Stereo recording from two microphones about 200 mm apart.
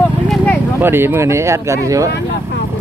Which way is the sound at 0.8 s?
10° right (ahead or behind).